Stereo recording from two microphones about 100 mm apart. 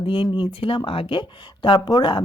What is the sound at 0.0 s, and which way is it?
Speech, 55° left (ahead or behind).